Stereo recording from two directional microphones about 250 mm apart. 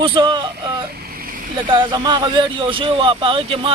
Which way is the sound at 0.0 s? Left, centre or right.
Centre.